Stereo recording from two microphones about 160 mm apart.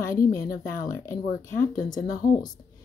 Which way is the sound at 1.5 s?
55° left (ahead or behind).